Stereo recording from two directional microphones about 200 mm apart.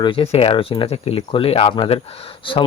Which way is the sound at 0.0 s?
25° left (ahead or behind).